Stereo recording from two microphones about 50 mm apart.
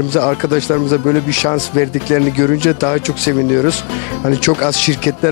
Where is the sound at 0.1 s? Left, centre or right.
Left.